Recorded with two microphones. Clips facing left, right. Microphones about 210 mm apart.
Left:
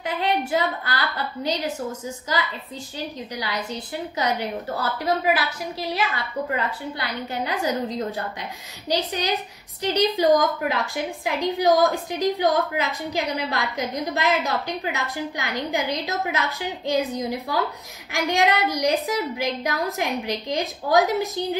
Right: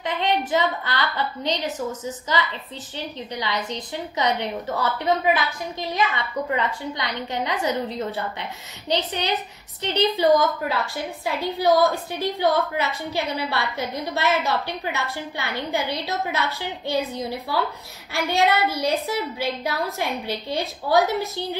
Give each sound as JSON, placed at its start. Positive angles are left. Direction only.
{"t": 0.0, "sound": "a woman's voice", "side_deg": 10}